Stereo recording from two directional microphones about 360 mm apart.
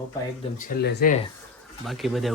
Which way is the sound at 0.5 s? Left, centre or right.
Left.